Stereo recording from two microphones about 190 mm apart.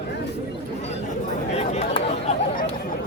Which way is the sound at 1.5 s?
35° left (ahead or behind).